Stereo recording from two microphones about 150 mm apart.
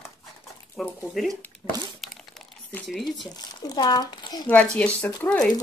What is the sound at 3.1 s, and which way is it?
Speech, 25° left (ahead or behind).